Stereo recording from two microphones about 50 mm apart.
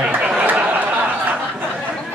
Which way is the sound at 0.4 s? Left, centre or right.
Right.